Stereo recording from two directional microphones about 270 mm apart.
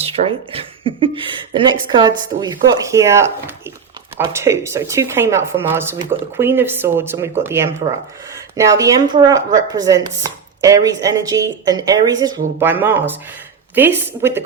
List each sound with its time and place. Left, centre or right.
0.0 s speech: right